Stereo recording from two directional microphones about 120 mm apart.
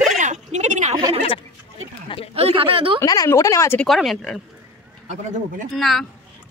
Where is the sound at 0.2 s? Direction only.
80° right.